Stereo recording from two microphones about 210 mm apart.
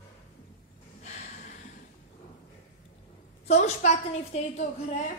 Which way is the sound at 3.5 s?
30° left (ahead or behind).